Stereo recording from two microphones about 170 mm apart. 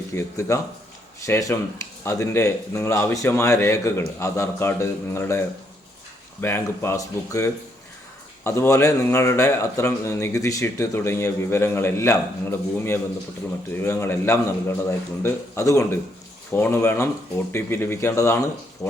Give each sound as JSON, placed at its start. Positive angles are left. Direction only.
{"t": 0.1, "sound": "a man's voice", "side_deg": 15}
{"t": 6.4, "sound": "a man's voice", "side_deg": 15}